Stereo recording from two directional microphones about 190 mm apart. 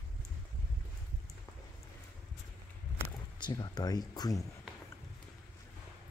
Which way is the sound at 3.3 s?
20° left (ahead or behind).